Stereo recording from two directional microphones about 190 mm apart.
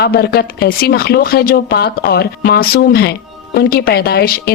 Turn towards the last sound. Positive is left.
turn(degrees=55)  # may be behind; listen again after turning